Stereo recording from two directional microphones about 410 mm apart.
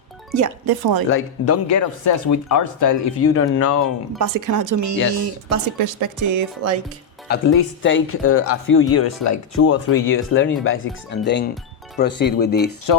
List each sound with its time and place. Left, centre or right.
0.3 s speech: right
1.1 s speech: left
4.2 s speech: right
7.3 s speech: left